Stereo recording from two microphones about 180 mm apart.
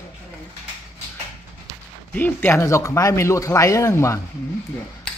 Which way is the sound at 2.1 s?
10° left (ahead or behind).